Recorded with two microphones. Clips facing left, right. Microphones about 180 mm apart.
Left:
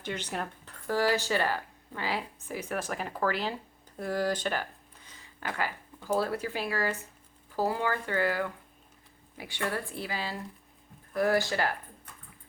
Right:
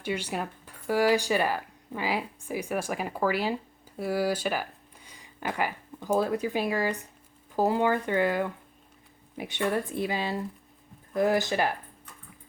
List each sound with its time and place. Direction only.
0.0 s speech: 10° right (ahead or behind)